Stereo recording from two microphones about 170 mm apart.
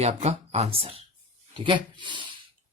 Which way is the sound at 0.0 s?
40° right (ahead or behind).